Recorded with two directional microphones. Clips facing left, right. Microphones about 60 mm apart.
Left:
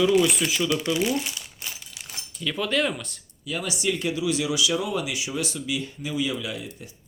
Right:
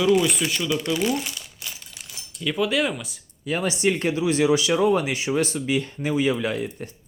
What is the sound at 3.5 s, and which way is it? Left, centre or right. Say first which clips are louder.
Speech: right 5 dB; right.